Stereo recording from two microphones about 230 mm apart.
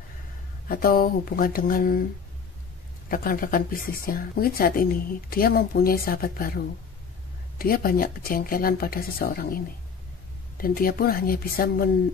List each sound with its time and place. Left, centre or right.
0.7 s speech: left
3.1 s speech: left
10.6 s speech: left